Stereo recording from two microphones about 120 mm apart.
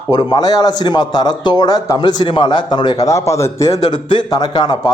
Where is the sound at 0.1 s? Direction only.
35° left (ahead or behind).